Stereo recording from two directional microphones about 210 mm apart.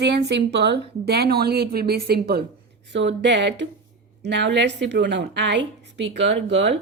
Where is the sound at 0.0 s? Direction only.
55° right (ahead or behind).